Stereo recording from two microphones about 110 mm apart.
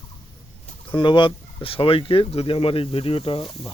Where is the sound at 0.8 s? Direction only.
50° left (ahead or behind).